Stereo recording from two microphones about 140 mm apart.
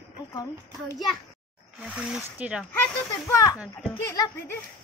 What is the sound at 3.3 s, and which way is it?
Speech, 25° left (ahead or behind).